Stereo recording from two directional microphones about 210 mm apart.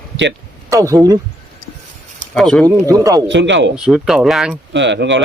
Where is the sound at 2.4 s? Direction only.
Centre (ahead or behind).